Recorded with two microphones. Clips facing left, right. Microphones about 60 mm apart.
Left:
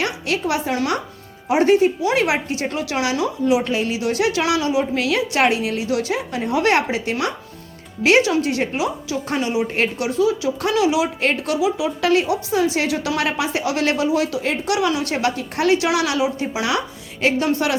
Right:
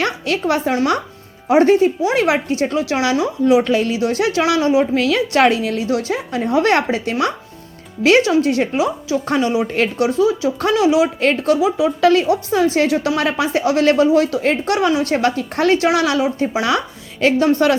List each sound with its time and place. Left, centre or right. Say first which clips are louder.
0.0 s a woman's voice: right 3 dB; right
5.0 s speech: right 4 dB; right